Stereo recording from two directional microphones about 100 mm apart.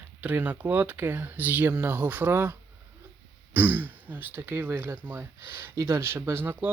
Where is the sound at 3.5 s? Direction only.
20° right (ahead or behind).